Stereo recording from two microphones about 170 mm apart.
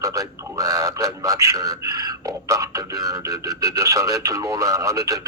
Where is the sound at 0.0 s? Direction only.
20° right (ahead or behind).